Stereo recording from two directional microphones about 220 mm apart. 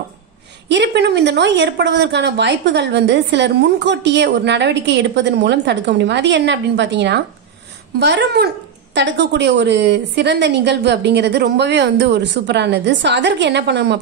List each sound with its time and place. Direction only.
0.7 s speech: 50° right (ahead or behind)